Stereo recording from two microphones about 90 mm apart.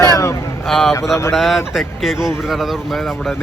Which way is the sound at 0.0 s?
35° left (ahead or behind).